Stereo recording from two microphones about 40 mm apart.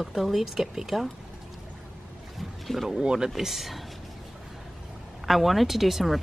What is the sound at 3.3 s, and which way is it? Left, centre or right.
Speech, centre.